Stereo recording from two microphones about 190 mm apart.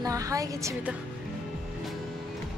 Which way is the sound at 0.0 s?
15° right (ahead or behind).